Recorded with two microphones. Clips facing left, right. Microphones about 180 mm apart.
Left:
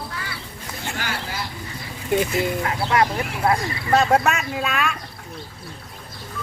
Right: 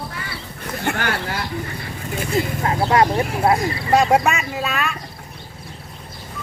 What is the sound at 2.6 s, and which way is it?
Speech, 35° right (ahead or behind).